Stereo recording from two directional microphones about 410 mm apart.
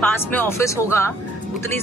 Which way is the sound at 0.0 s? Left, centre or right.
Centre.